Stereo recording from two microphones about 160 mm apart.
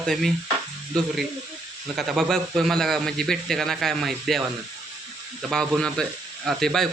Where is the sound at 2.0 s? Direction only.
Centre (ahead or behind).